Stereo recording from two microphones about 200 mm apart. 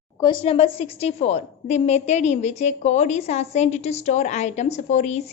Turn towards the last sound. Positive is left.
turn(degrees=35)  # may be behind; listen again after turning